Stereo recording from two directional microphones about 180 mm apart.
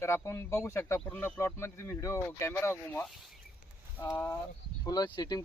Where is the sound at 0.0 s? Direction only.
15° left (ahead or behind).